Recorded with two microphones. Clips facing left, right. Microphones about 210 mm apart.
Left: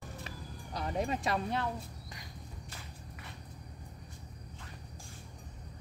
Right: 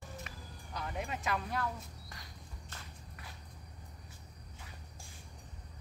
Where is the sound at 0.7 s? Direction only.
35° left (ahead or behind).